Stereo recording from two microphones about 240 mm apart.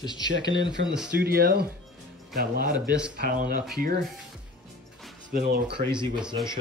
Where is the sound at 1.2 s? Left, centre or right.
Right.